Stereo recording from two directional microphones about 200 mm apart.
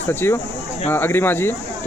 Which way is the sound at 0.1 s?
10° left (ahead or behind).